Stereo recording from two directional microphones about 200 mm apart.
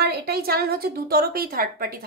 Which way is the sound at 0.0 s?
50° right (ahead or behind).